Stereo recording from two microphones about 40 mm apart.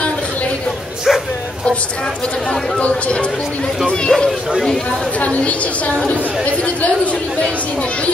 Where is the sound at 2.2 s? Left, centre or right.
Centre.